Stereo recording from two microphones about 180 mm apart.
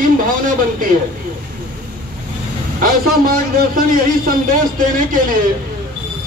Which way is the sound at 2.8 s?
50° right (ahead or behind).